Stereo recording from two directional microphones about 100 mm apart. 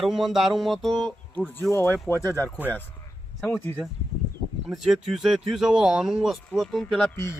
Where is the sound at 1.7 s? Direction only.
25° left (ahead or behind).